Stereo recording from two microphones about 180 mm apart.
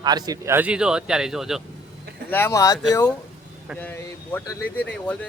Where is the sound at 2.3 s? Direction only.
15° left (ahead or behind).